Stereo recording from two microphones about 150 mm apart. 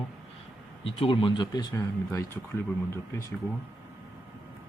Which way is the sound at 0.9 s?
40° left (ahead or behind).